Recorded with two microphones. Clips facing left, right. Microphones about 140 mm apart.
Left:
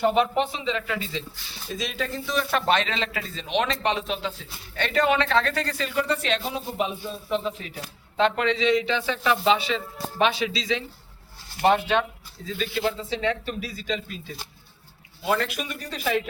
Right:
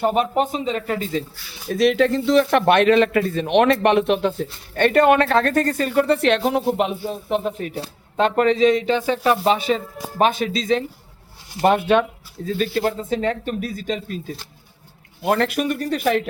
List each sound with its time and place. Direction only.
0.0 s speech: 45° right (ahead or behind)
1.7 s a man's voice: 65° right (ahead or behind)
8.1 s speech: 45° right (ahead or behind)
15.2 s a man's voice: 55° right (ahead or behind)